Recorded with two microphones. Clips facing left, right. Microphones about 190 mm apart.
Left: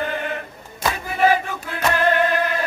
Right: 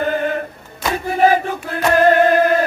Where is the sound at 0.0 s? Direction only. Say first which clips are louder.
Right 7 dB; 40° right (ahead or behind).